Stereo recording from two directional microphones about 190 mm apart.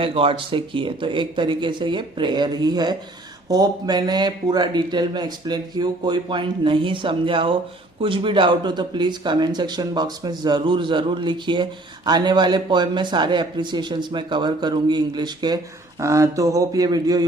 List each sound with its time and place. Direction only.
0.0 s speech: 30° right (ahead or behind)